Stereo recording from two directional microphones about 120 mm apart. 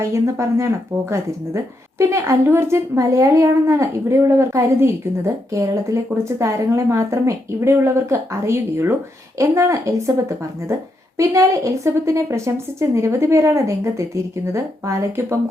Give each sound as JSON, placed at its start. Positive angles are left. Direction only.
{"t": 0.0, "sound": "a woman's voice", "side_deg": -25}